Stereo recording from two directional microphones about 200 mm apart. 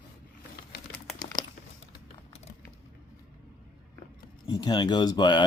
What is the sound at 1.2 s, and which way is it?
Crumpling, 20° left (ahead or behind).